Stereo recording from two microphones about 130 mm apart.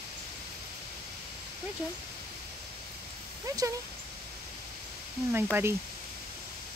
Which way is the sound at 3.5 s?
25° right (ahead or behind).